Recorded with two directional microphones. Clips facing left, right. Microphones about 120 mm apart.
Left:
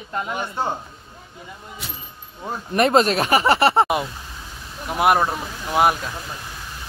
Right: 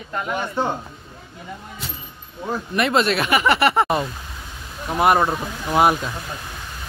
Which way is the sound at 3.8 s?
10° left (ahead or behind).